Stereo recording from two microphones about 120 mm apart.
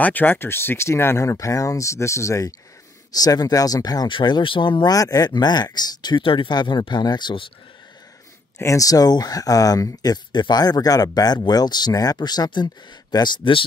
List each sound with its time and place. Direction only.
0.0 s speech: 15° left (ahead or behind); by 4.9 s 40° left (ahead or behind)
4.9 s speech: 30° left (ahead or behind)
8.5 s speech: 25° left (ahead or behind); by 13.7 s 45° left (ahead or behind)